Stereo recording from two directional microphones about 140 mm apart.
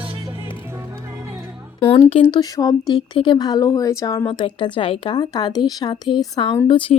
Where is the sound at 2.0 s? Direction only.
45° left (ahead or behind).